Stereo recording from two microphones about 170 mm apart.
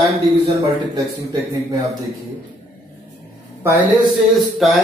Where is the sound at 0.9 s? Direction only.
25° right (ahead or behind).